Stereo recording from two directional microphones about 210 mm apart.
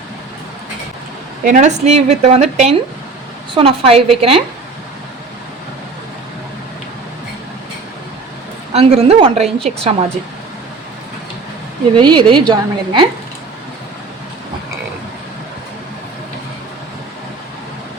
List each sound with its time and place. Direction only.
1.5 s a woman's voice: 35° right (ahead or behind)
8.7 s a woman's voice: 30° right (ahead or behind)
11.9 s a woman's voice: 20° right (ahead or behind)